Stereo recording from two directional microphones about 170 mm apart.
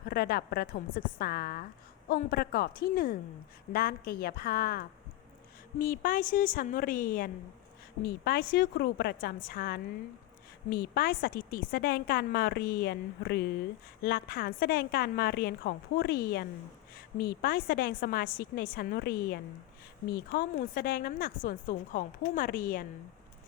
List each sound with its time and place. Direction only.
0.1 s a woman's voice: 65° left (ahead or behind)
14.0 s a woman's voice: 60° left (ahead or behind)